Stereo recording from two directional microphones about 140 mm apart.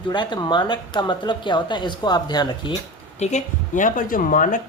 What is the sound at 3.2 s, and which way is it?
Speech, 60° left (ahead or behind).